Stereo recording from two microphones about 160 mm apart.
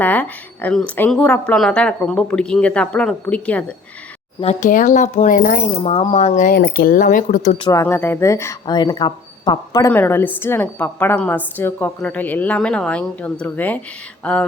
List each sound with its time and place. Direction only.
0.0 s a woman's voice: 10° left (ahead or behind)
4.4 s speech: 40° left (ahead or behind)
4.7 s speech: 55° left (ahead or behind)
5.7 s speech: 40° left (ahead or behind)
7.7 s a woman's voice: 15° left (ahead or behind)